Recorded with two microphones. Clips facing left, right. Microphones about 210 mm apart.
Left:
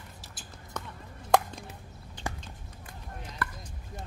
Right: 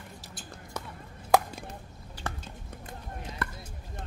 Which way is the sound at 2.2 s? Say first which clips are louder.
Left 1 dB; 10° left (ahead or behind).